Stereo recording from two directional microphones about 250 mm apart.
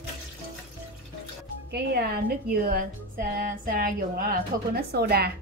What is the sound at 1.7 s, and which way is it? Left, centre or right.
A woman's voice, right.